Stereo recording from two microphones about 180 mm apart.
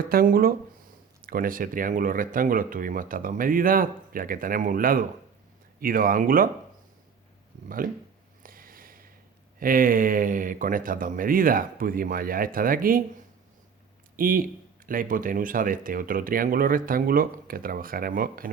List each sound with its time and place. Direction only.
0.1 s speech: 55° right (ahead or behind)
8.4 s a sound: 50° right (ahead or behind)
9.6 s speech: 50° right (ahead or behind)
14.2 s speech: 50° right (ahead or behind)